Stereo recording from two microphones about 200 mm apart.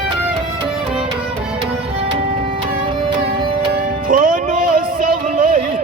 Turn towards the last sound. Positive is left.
turn(degrees=-40)  # may be behind; listen again after turning